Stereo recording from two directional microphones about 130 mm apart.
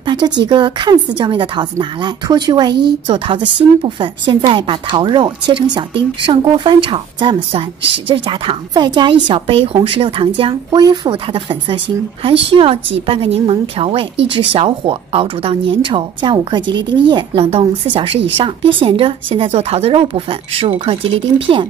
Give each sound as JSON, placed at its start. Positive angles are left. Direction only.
{"t": 0.0, "sound": "a woman's voice", "side_deg": -35}